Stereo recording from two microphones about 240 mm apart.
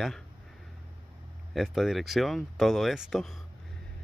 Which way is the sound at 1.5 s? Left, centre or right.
Centre.